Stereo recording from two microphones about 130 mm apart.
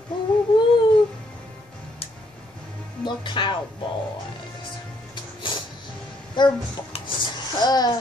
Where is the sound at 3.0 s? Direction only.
40° left (ahead or behind).